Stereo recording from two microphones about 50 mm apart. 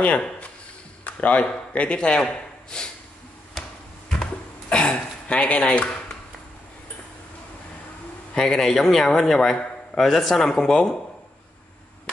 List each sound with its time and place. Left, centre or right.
1.0 s speech: left
4.2 s a sound: centre
8.4 s a man's voice: centre